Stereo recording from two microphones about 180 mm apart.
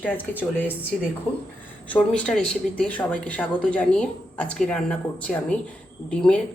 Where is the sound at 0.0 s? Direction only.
10° left (ahead or behind).